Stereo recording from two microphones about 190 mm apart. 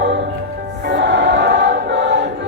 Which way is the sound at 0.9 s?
70° right (ahead or behind).